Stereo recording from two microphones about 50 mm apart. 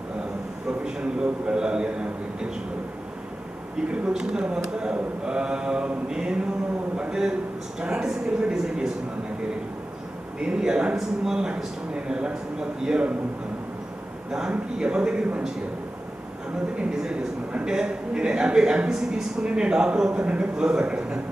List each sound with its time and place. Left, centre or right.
0.8 s a man's voice: centre
3.9 s a man's voice: centre
10.4 s a man's voice: centre
14.3 s a man's voice: centre
16.7 s a man's voice: centre